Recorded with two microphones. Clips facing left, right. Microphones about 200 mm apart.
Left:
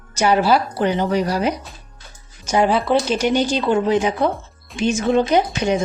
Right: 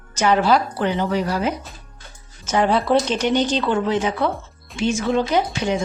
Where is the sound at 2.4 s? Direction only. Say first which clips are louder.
Left 2 dB; 15° left (ahead or behind).